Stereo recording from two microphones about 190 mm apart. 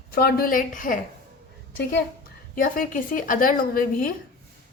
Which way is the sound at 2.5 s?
45° left (ahead or behind).